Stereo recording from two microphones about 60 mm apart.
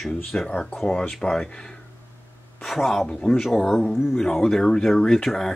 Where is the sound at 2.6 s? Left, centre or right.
Centre.